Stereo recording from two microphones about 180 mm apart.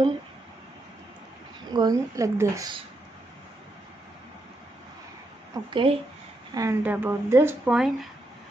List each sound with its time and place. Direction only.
1.7 s a woman's voice: 20° right (ahead or behind)
5.5 s a woman's voice: 25° right (ahead or behind)
6.5 s speech: 15° right (ahead or behind)
7.7 s speech: centre (ahead or behind)